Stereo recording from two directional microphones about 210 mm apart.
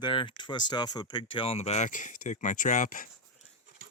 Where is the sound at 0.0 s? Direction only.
20° left (ahead or behind); by 3.1 s 40° left (ahead or behind).